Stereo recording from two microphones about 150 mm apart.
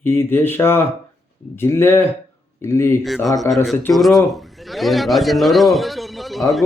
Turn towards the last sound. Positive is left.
turn(degrees=0)  # may be behind; listen again after turning